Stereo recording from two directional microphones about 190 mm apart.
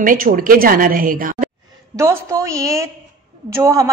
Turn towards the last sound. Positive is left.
turn(degrees=-15)  # may be behind; listen again after turning